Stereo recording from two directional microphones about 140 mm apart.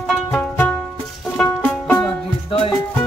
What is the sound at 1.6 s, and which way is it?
Music, 5° left (ahead or behind).